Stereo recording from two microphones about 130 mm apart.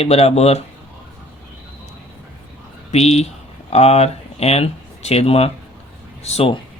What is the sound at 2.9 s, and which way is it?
Speech, 55° left (ahead or behind).